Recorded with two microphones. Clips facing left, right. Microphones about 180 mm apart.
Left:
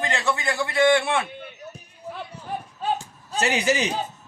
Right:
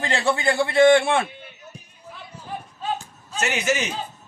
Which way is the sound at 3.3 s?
35° left (ahead or behind).